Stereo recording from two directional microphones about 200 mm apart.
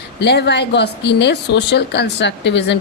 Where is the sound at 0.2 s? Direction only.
60° left (ahead or behind).